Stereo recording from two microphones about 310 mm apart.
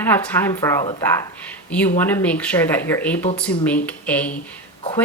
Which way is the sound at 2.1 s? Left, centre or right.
Centre.